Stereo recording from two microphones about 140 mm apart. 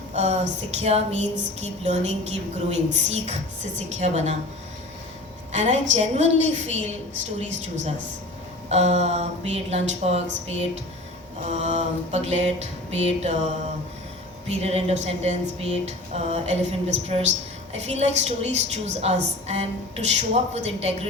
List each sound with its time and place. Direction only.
0.1 s a sound: 55° right (ahead or behind)
0.8 s a woman's voice: 50° right (ahead or behind)
5.5 s a woman's voice: 50° right (ahead or behind)
8.7 s a woman's voice: 55° right (ahead or behind)
14.4 s a woman's voice: 50° right (ahead or behind)